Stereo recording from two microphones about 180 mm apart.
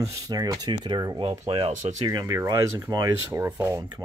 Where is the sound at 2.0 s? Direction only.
20° right (ahead or behind).